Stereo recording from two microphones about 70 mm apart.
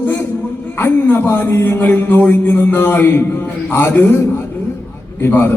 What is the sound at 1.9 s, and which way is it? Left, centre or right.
Music, left.